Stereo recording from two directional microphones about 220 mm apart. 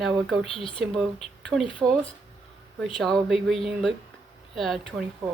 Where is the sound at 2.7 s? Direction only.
Centre (ahead or behind).